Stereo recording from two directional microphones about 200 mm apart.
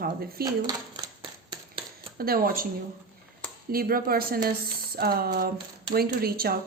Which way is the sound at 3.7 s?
45° right (ahead or behind).